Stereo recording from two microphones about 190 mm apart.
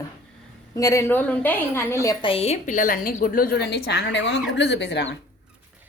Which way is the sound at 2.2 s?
30° left (ahead or behind).